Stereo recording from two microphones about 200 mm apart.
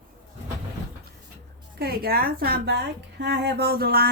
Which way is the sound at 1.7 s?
50° right (ahead or behind).